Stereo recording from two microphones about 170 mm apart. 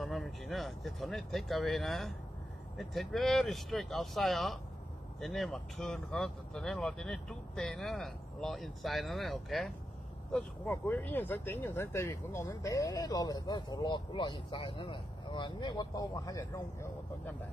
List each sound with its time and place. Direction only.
0.0 s speech: centre (ahead or behind); by 16.6 s 25° left (ahead or behind)